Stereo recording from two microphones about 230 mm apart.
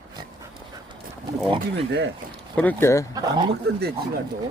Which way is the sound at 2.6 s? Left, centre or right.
Centre.